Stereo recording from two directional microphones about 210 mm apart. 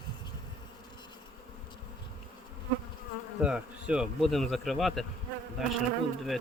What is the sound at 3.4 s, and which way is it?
Bee, 5° right (ahead or behind).